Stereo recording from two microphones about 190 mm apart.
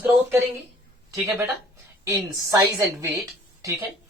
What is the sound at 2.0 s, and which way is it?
Speech, 15° right (ahead or behind).